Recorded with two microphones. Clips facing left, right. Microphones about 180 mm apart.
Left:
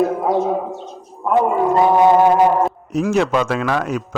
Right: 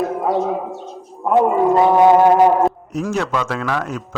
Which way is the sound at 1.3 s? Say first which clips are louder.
Right 2 dB; centre (ahead or behind).